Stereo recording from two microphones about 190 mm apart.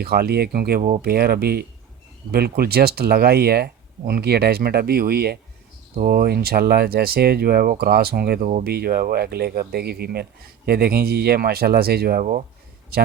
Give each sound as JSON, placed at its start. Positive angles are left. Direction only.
{"t": 0.0, "sound": "speech", "side_deg": -55}